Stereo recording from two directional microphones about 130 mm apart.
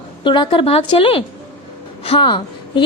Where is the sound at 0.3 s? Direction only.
40° left (ahead or behind).